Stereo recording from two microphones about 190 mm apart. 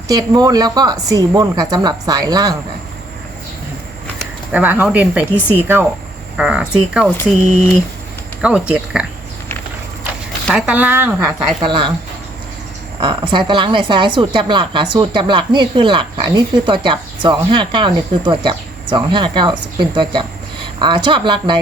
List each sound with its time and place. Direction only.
0.1 s a woman's voice: 20° right (ahead or behind)
4.5 s speech: 10° right (ahead or behind)
8.4 s speech: 5° right (ahead or behind)
10.4 s speech: 5° right (ahead or behind)
11.3 s a woman's voice: 25° right (ahead or behind)
13.0 s a woman's voice: 25° right (ahead or behind)